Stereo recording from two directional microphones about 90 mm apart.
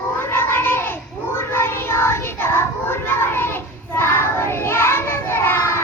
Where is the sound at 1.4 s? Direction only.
25° left (ahead or behind).